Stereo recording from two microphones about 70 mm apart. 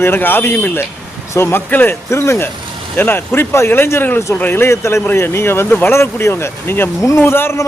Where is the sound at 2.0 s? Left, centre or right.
Left.